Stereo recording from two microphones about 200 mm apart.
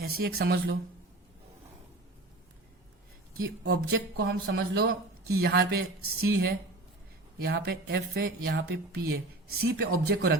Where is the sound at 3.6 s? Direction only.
55° right (ahead or behind).